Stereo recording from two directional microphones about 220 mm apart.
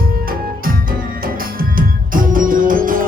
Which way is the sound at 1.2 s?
40° right (ahead or behind).